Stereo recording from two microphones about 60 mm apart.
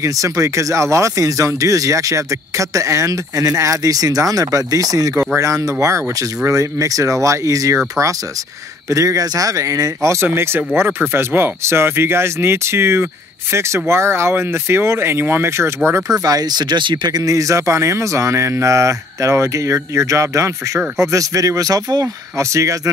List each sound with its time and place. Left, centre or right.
0.0 s speech: right
5.4 s speech: right
8.9 s speech: right
10.3 s speech: right
17.2 s speech: right